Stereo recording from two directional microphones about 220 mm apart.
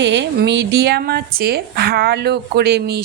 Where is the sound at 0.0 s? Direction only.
55° right (ahead or behind).